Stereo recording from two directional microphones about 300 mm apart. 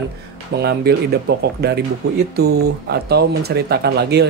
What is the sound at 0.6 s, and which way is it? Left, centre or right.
Speech, right.